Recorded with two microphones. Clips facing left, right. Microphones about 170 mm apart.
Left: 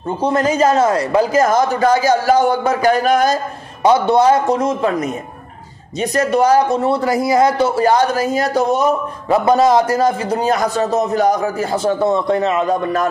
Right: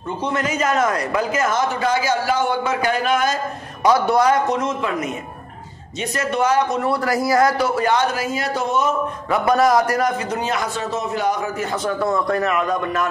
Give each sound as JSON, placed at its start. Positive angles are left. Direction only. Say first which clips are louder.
{"t": 0.2, "sound": "speech", "louder": "left 8 dB", "side_deg": 35}
{"t": 3.8, "sound": "a man's voice", "louder": "left 4 dB", "side_deg": 25}